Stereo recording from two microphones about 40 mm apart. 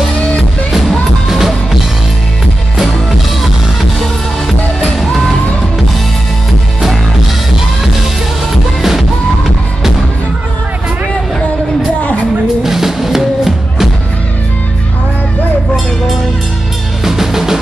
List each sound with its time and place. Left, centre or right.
0.7 s music: centre
4.0 s music: centre
8.8 s music: centre
12.6 s music: centre
17.0 s drum kit: centre